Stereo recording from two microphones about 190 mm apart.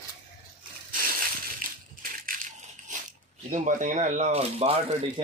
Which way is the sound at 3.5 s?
40° right (ahead or behind).